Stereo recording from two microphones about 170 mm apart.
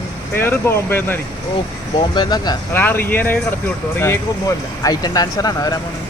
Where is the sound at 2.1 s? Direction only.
25° left (ahead or behind).